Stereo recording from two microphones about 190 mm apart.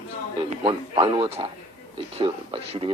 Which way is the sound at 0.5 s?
25° right (ahead or behind).